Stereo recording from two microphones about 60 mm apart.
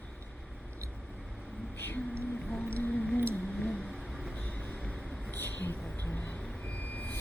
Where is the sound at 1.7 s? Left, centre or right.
Left.